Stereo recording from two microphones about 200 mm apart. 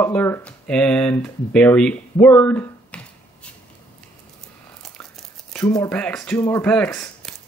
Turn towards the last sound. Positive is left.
turn(degrees=5)  # may be behind; listen again after turning